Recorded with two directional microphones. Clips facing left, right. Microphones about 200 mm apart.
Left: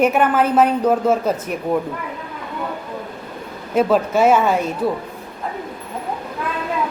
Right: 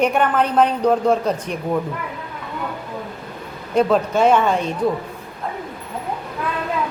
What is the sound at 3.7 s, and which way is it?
A man's voice, 5° left (ahead or behind).